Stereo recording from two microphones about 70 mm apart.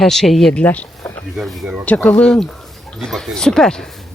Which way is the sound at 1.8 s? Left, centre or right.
Left.